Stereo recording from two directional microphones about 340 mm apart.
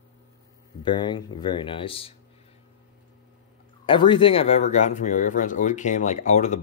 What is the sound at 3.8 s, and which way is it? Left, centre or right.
Speech, centre.